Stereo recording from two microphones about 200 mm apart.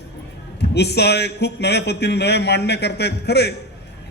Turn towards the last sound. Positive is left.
turn(degrees=55)  # may be behind; listen again after turning